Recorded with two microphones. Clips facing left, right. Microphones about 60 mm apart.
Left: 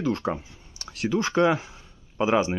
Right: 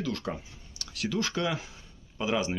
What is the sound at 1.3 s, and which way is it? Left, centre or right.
Speech, left.